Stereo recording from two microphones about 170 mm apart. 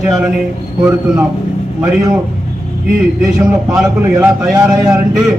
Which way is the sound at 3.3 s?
Centre (ahead or behind).